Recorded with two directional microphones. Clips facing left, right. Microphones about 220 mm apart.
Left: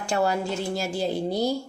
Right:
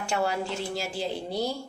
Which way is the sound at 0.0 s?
35° left (ahead or behind).